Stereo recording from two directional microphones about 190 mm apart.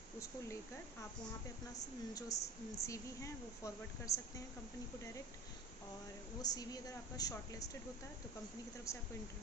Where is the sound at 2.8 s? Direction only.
15° left (ahead or behind).